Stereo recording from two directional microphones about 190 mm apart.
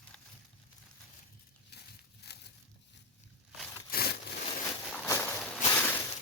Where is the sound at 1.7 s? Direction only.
60° left (ahead or behind).